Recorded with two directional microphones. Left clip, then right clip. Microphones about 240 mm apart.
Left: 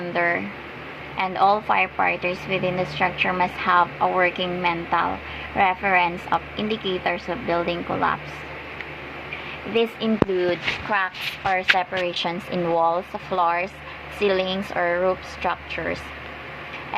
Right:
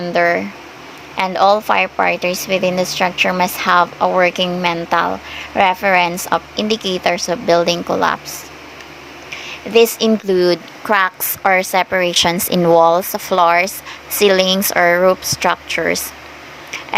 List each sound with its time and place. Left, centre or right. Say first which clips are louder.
0.0 s speech: right 8 dB; right
9.7 s speech: right 9 dB; right